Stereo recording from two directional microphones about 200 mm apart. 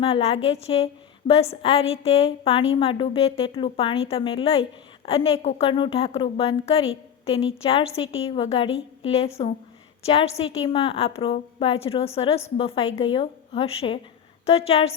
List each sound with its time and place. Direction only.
0.0 s a woman's voice: 30° left (ahead or behind)
8.0 s a woman's voice: 80° left
8.3 s a woman's voice: 30° left (ahead or behind)